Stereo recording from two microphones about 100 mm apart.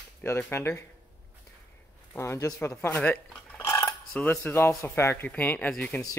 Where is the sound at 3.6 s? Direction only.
30° left (ahead or behind).